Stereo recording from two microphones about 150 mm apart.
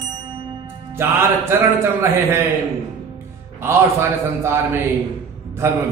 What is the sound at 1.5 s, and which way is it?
Speech, 15° right (ahead or behind).